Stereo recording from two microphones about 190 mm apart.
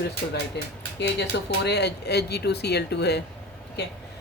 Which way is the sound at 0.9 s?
60° left (ahead or behind).